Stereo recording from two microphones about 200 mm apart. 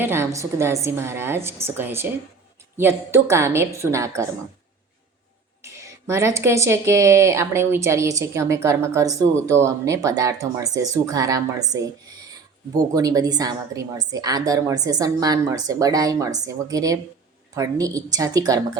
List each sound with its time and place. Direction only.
0.0 s speech: 10° right (ahead or behind)
5.6 s a woman's voice: 15° right (ahead or behind)